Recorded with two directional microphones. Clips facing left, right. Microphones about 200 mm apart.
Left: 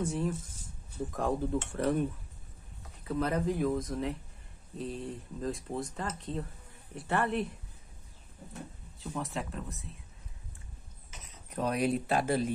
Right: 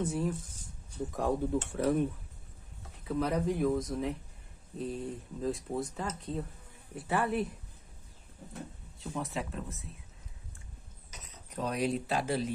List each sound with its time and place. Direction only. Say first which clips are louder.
0.0 s speech: even; centre (ahead or behind)
9.0 s speech: even; centre (ahead or behind)
11.5 s speech: left 2 dB; 55° left (ahead or behind)